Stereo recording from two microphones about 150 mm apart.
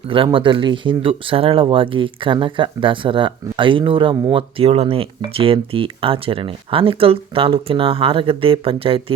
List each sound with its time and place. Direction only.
0.1 s speech: 35° right (ahead or behind)